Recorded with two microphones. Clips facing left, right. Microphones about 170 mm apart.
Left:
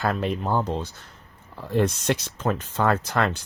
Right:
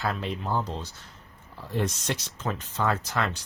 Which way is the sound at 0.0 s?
50° left (ahead or behind).